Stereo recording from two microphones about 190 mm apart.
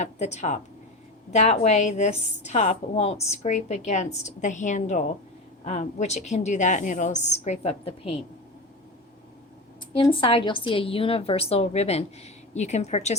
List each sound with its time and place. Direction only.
0.0 s a woman's voice: 35° left (ahead or behind)
9.9 s a woman's voice: 25° left (ahead or behind)